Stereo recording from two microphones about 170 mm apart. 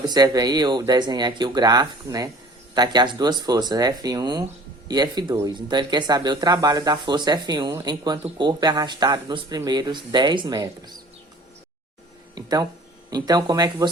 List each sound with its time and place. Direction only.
0.0 s speech: 25° right (ahead or behind)
12.3 s a sound: 20° right (ahead or behind)
13.1 s speech: 25° right (ahead or behind)